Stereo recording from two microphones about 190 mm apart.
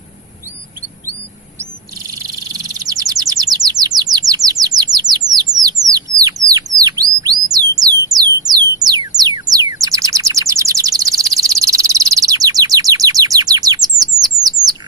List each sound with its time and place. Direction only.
2.0 s bird: 20° right (ahead or behind)
8.2 s music: 20° right (ahead or behind)
14.4 s bird: 20° right (ahead or behind)